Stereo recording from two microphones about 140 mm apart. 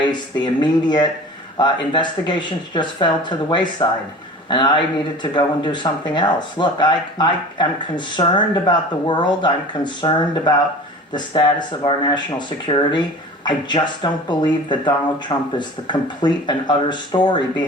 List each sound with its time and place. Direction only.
0.0 s speech: 35° left (ahead or behind)